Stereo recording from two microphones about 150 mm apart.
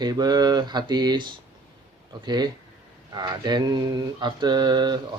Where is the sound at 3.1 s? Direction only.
30° right (ahead or behind).